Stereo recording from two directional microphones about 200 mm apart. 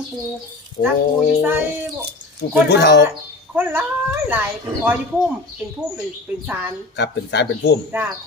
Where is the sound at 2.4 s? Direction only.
55° left (ahead or behind).